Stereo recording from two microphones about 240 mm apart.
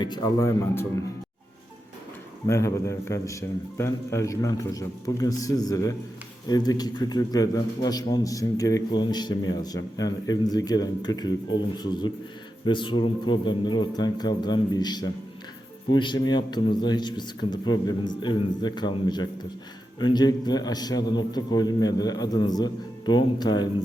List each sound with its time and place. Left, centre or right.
0.0 s a man's voice: centre
2.5 s a man's voice: centre